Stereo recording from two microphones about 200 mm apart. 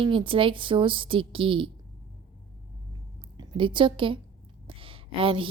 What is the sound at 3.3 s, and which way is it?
A woman's voice, 25° right (ahead or behind).